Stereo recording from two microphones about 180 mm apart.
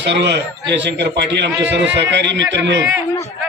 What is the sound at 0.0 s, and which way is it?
A man's voice, 75° right (ahead or behind).